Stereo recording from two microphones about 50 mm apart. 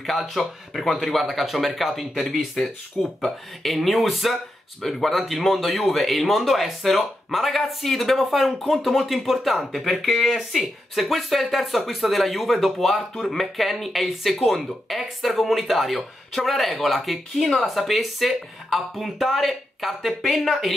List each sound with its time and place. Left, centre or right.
0.0 s speech: centre